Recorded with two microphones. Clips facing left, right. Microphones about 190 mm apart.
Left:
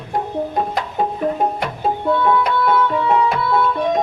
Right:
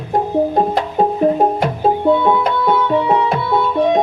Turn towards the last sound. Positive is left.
turn(degrees=-20)  # may be behind; listen again after turning